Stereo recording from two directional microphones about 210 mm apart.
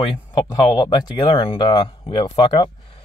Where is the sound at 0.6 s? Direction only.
20° left (ahead or behind).